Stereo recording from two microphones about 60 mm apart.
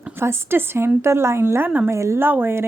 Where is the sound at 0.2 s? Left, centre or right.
Right.